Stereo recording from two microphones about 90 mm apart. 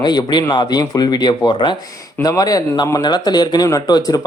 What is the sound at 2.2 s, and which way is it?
Speech, 45° left (ahead or behind).